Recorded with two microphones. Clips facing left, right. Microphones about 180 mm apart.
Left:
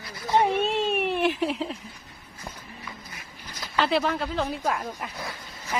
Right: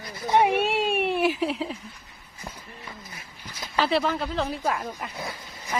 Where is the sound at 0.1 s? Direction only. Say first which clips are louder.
Right 2 dB; 15° right (ahead or behind); by 1.8 s centre (ahead or behind).